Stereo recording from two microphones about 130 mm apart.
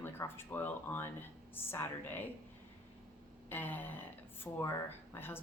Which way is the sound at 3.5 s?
15° left (ahead or behind).